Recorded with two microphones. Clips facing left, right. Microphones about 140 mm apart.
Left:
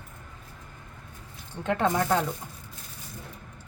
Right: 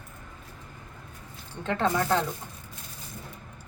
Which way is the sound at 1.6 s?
15° left (ahead or behind).